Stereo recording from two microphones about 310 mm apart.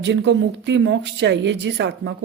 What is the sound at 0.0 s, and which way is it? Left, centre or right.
Speech, right.